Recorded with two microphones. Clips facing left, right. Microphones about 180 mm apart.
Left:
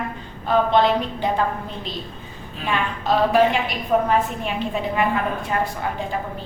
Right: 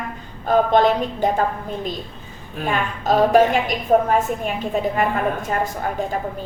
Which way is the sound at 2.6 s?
45° right (ahead or behind).